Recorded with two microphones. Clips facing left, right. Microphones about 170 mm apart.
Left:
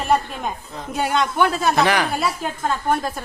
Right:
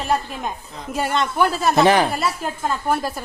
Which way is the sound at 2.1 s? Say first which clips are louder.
Even; centre (ahead or behind).